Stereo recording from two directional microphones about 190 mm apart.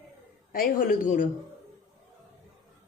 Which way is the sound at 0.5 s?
50° left (ahead or behind).